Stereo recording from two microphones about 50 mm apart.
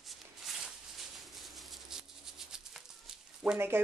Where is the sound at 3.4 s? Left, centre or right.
Centre.